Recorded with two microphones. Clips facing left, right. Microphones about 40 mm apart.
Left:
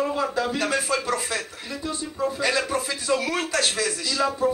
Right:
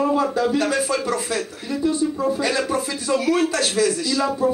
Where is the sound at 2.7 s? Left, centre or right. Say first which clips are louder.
Right 3 dB; centre.